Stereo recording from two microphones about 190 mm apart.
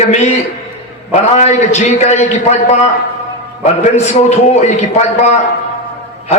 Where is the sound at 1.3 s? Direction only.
35° left (ahead or behind).